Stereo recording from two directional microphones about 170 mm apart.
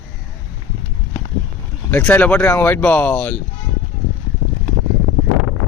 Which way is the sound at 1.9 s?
10° left (ahead or behind).